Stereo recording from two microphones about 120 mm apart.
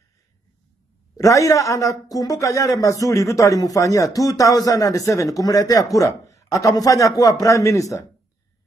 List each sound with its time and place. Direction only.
1.1 s speech: 30° left (ahead or behind)